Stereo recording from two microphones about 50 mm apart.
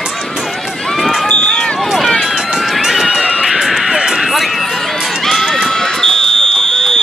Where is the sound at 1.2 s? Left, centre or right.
Left.